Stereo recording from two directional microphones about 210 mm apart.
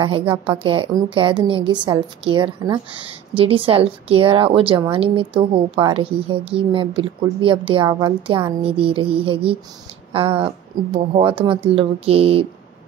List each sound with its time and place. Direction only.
0.0 s speech: 25° right (ahead or behind)